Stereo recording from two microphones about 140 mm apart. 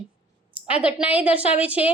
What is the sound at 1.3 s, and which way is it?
Speech, 45° left (ahead or behind).